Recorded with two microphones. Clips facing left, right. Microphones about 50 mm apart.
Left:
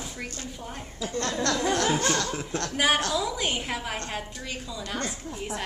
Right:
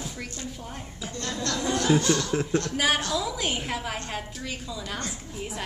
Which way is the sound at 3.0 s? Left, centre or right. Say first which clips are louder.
Left 1 dB; centre.